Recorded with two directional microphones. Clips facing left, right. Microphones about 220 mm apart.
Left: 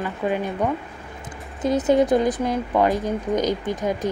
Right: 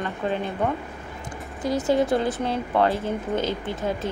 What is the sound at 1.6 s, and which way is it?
Speech, 20° left (ahead or behind).